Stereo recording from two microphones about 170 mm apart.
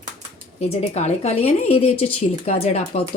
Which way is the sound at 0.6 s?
40° left (ahead or behind).